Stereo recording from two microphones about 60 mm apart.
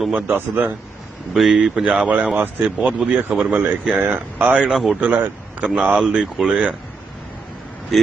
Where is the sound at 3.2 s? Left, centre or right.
Right.